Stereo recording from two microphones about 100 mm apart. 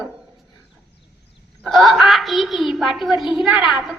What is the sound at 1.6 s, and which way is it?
A woman's voice, centre (ahead or behind).